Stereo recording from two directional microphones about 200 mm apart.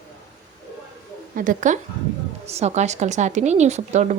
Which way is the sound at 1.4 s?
40° right (ahead or behind).